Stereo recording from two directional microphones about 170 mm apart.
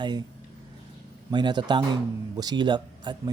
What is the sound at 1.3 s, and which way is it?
Speech, 25° right (ahead or behind).